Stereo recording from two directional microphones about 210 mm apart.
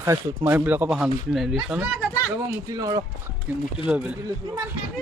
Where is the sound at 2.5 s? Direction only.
15° right (ahead or behind).